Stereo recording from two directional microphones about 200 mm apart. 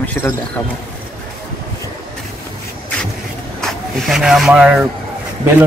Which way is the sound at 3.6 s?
Centre (ahead or behind).